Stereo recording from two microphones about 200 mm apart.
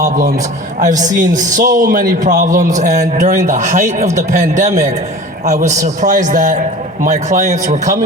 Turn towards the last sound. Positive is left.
turn(degrees=-35)  # may be behind; listen again after turning